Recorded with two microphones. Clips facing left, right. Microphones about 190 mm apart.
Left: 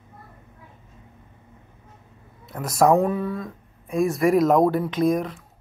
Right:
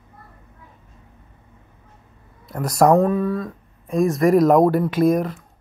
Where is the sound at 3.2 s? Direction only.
25° left (ahead or behind).